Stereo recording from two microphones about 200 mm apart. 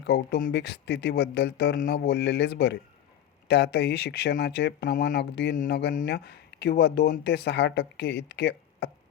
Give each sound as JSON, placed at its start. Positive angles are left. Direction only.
{"t": 0.0, "sound": "speech", "side_deg": 55}